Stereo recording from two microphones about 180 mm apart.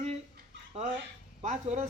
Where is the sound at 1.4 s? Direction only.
40° right (ahead or behind).